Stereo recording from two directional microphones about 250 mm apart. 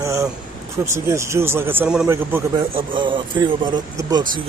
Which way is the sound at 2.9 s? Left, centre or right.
Centre.